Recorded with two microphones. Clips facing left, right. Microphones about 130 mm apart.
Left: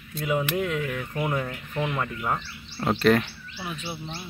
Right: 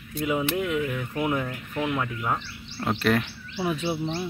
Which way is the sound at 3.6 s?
90° right.